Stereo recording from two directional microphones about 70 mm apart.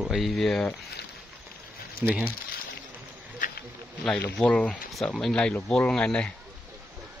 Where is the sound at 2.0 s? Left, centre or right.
Right.